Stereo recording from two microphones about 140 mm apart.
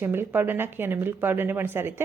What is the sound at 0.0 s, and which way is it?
Speech, 15° right (ahead or behind).